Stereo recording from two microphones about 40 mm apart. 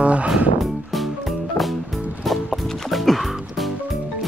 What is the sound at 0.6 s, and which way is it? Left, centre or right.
Music, centre.